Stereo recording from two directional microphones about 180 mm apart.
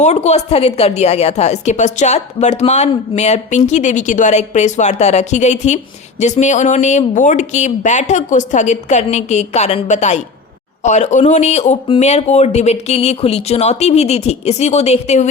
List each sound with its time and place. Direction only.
0.0 s speech: 40° left (ahead or behind)